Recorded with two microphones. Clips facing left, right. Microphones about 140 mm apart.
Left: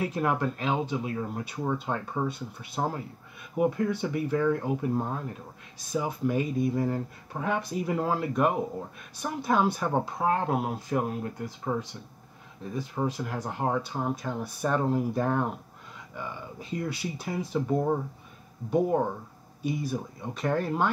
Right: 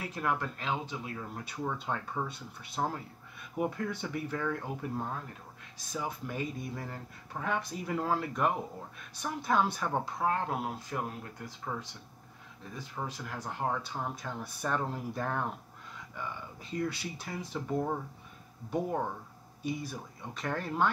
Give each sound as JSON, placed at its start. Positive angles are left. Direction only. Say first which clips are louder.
{"t": 0.0, "sound": "speech", "louder": "left 6 dB", "side_deg": 20}
{"t": 4.5, "sound": "speech", "louder": "left 9 dB", "side_deg": 20}
{"t": 16.7, "sound": "speech", "louder": "left 2 dB", "side_deg": 10}
{"t": 17.6, "sound": "speech", "louder": "left 4 dB", "side_deg": 20}